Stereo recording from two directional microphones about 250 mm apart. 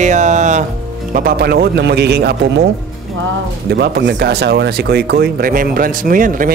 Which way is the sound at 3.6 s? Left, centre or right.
Right.